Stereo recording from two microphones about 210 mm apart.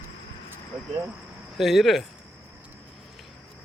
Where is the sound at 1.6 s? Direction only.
Centre (ahead or behind).